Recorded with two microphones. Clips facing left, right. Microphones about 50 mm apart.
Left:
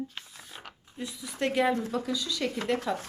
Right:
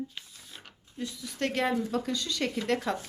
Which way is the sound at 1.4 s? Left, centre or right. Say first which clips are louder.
Left 2 dB; centre.